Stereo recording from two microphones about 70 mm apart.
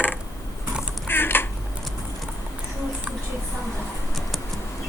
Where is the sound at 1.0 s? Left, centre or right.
Left.